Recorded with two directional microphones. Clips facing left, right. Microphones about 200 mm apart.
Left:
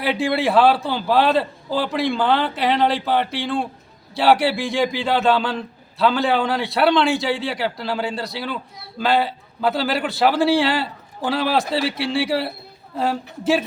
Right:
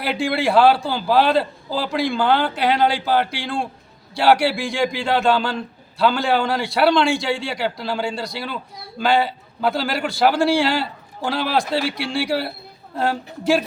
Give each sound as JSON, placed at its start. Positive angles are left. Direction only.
{"t": 0.0, "sound": "a man's voice", "side_deg": 0}